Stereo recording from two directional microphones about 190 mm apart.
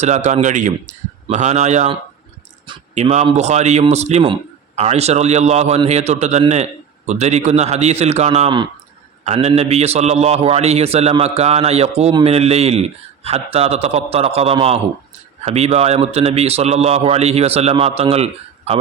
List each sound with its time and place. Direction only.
0.0 s a man's voice: 35° right (ahead or behind)